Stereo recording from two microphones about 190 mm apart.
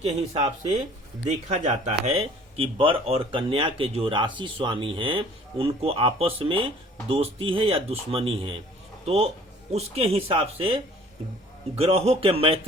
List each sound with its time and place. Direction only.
0.3 s a man's voice: 30° right (ahead or behind)